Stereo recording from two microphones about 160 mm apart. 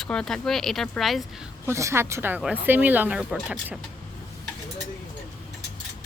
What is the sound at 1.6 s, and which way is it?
Speech, 15° right (ahead or behind).